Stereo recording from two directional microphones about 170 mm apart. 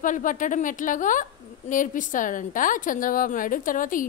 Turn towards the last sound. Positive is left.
turn(degrees=50)  # may be behind; listen again after turning